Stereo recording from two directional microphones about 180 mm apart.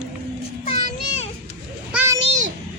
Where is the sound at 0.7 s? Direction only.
40° left (ahead or behind).